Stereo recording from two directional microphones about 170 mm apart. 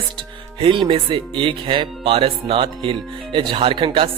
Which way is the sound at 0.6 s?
30° right (ahead or behind).